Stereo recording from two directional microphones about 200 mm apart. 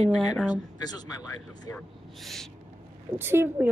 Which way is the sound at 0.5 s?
20° left (ahead or behind).